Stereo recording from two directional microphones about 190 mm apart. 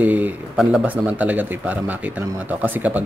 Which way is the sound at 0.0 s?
10° right (ahead or behind).